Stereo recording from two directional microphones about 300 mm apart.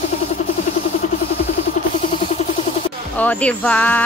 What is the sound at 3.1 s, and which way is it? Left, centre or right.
Speech, centre.